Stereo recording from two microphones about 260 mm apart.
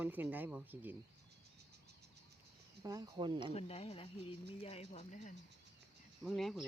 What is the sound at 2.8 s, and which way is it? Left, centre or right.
Speech, centre.